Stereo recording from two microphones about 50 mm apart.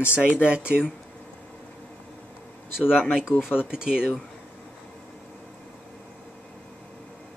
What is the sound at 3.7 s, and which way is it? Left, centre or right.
Speech, centre.